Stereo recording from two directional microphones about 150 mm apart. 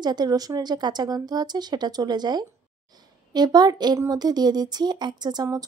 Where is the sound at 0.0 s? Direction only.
25° right (ahead or behind).